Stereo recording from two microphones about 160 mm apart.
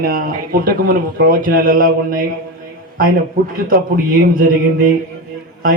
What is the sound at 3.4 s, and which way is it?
Speech, 65° right (ahead or behind).